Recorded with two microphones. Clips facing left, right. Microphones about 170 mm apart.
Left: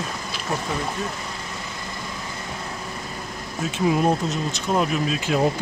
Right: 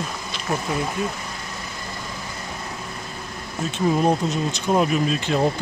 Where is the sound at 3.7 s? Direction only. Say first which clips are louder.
Right 1 dB; 5° left (ahead or behind).